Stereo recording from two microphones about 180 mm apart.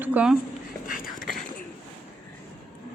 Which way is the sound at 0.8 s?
50° left (ahead or behind).